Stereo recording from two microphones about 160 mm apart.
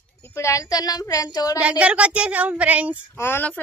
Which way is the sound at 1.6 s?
10° right (ahead or behind).